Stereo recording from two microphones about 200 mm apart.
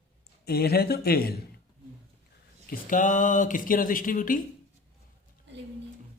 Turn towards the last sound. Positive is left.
turn(degrees=45)  # may be behind; listen again after turning